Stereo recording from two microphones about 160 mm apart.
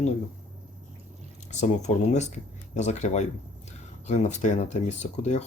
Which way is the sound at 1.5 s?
45° left (ahead or behind).